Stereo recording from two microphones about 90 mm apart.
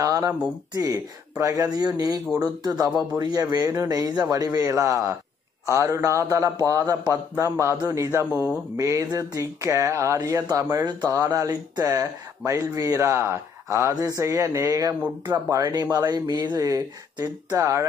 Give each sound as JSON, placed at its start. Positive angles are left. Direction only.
{"t": 0.0, "sound": "a sound", "side_deg": -40}
{"t": 0.7, "sound": "speech", "side_deg": -40}
{"t": 12.0, "sound": "speech", "side_deg": -35}